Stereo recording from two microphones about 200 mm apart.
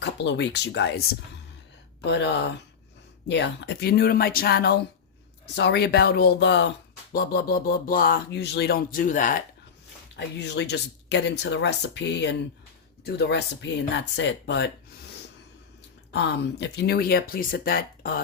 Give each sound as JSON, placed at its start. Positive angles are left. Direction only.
{"t": 0.0, "sound": "speech", "side_deg": 60}
{"t": 2.0, "sound": "speech", "side_deg": 60}
{"t": 7.1, "sound": "speech", "side_deg": 50}
{"t": 10.2, "sound": "speech", "side_deg": 60}
{"t": 16.1, "sound": "speech", "side_deg": 60}